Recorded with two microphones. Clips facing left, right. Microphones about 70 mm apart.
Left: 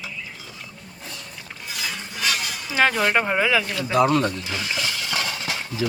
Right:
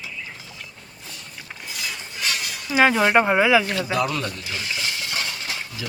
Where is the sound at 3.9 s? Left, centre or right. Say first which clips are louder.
Left 5 dB; left.